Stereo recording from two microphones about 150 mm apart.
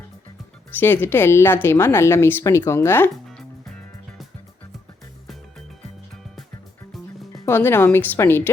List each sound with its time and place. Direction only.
0.8 s speech: 15° left (ahead or behind)
3.2 s music: centre (ahead or behind)
6.9 s music: centre (ahead or behind)
7.4 s speech: 15° left (ahead or behind)